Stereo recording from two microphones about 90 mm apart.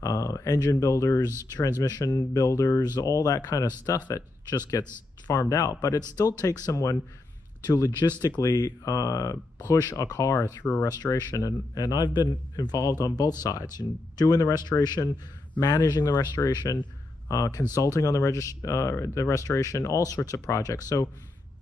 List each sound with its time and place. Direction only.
0.0 s a man's voice: 40° left (ahead or behind)